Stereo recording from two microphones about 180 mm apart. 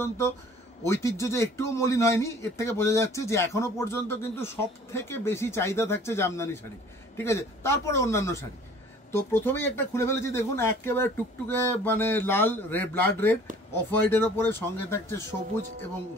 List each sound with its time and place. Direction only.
0.8 s a man's voice: 15° left (ahead or behind)